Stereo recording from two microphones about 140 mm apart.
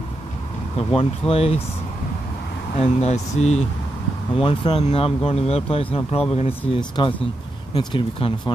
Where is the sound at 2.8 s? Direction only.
50° left (ahead or behind).